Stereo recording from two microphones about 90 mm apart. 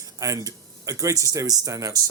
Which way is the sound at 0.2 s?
40° right (ahead or behind).